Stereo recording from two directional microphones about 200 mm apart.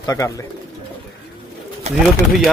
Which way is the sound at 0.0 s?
15° left (ahead or behind).